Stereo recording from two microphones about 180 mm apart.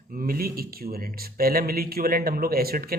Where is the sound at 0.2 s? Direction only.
55° right (ahead or behind).